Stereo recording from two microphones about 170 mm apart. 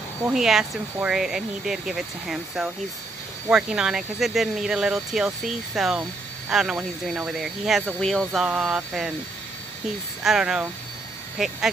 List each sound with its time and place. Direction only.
0.3 s speech: 5° right (ahead or behind)
10.2 s speech: 5° right (ahead or behind)